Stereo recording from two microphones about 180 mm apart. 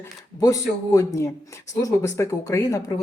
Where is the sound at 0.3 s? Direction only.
20° left (ahead or behind).